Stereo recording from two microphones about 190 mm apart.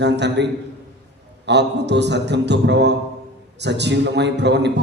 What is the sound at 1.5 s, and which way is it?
A man's voice, 65° right (ahead or behind).